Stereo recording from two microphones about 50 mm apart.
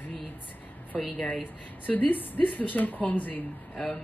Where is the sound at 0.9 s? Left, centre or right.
Left.